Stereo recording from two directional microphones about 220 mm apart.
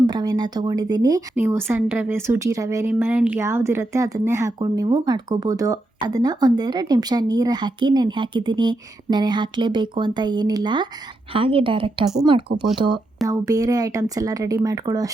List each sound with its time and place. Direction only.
0.1 s speech: 20° right (ahead or behind)